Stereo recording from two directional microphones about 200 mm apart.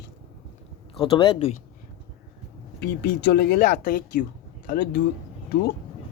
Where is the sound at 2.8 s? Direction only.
55° left (ahead or behind).